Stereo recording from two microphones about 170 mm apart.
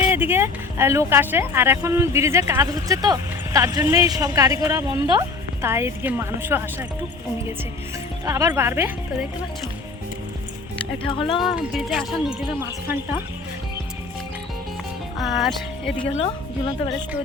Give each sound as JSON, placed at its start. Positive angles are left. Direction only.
{"t": 0.1, "sound": "speech", "side_deg": -10}
{"t": 8.2, "sound": "speech", "side_deg": -20}
{"t": 10.9, "sound": "a woman's voice", "side_deg": 30}
{"t": 11.3, "sound": "speech", "side_deg": 0}
{"t": 15.2, "sound": "speech", "side_deg": 0}
{"t": 16.0, "sound": "a woman's voice", "side_deg": 30}